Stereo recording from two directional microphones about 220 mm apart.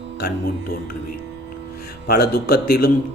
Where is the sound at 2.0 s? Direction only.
45° left (ahead or behind).